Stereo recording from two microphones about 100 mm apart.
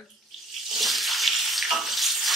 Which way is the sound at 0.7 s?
Centre (ahead or behind).